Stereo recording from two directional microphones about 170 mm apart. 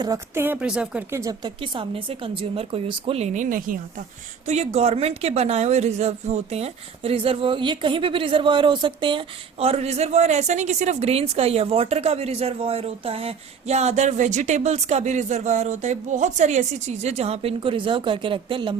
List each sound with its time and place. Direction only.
0.0 s a woman's voice: 20° right (ahead or behind)
1.1 s a woman's voice: 20° right (ahead or behind); by 3.8 s 50° right (ahead or behind)
4.4 s a woman's voice: 40° right (ahead or behind)